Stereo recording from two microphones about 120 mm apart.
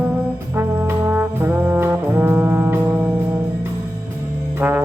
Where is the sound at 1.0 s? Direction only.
20° right (ahead or behind).